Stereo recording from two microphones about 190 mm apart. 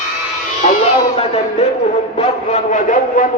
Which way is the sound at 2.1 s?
40° left (ahead or behind).